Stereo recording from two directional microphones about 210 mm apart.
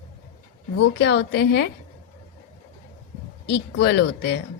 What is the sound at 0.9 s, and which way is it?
Speech, 55° left (ahead or behind).